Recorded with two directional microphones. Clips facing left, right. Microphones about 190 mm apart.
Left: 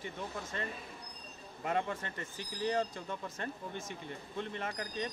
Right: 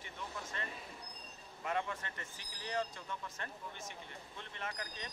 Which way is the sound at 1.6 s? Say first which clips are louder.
Left 4 dB; 35° left (ahead or behind).